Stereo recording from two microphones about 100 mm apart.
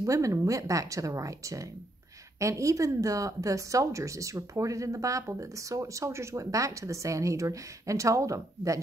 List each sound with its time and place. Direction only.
0.0 s speech: 30° right (ahead or behind)